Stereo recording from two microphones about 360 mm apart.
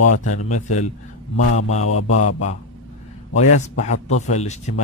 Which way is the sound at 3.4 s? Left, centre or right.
Centre.